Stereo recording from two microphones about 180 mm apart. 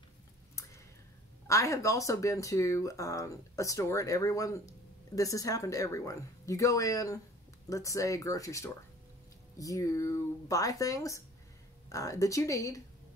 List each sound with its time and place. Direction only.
1.5 s speech: 15° left (ahead or behind)